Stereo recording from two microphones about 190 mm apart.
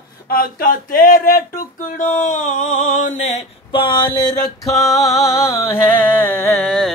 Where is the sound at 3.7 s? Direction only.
25° left (ahead or behind).